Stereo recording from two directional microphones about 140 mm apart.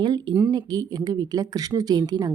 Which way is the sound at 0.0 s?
35° right (ahead or behind).